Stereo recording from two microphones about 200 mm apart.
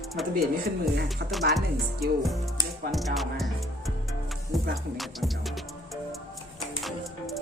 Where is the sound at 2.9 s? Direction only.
Centre (ahead or behind).